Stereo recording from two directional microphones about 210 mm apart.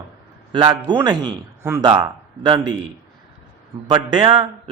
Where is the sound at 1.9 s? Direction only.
20° right (ahead or behind).